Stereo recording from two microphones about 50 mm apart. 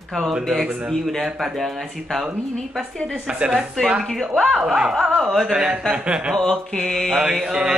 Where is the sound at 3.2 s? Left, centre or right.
Centre.